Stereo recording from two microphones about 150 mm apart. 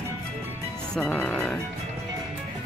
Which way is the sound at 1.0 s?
5° left (ahead or behind).